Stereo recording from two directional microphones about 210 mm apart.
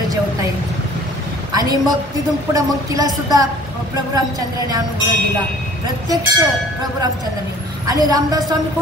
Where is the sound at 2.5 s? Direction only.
15° right (ahead or behind).